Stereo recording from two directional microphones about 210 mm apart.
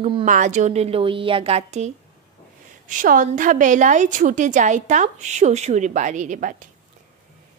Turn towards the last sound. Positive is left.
turn(degrees=-40)  # may be behind; listen again after turning